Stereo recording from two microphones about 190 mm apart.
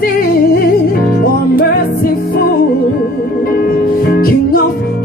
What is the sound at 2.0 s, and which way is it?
Music, 50° left (ahead or behind).